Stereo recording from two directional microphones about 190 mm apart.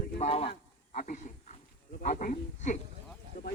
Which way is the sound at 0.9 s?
45° left (ahead or behind).